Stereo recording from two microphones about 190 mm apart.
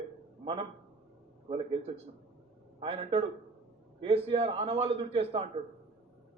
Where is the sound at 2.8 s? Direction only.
30° right (ahead or behind).